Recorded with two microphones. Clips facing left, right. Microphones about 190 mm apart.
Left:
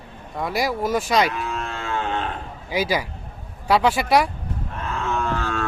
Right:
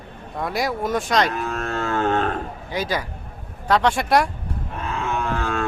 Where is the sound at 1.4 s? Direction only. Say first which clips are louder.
Right 3 dB; 45° right (ahead or behind).